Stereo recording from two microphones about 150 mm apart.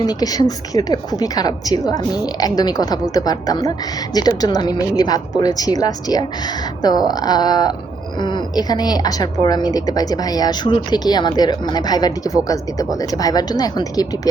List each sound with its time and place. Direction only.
0.0 s a woman's voice: 25° left (ahead or behind)